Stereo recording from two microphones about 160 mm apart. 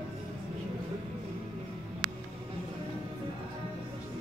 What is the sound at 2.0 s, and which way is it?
Music, 25° right (ahead or behind).